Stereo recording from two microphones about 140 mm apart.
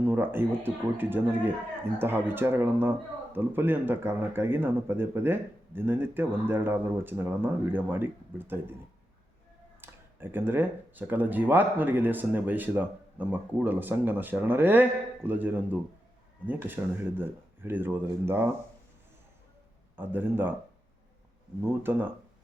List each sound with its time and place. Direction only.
0.0 s speech: 15° right (ahead or behind)
9.8 s speech: 15° right (ahead or behind)
20.0 s speech: 15° right (ahead or behind)
21.6 s speech: 15° right (ahead or behind)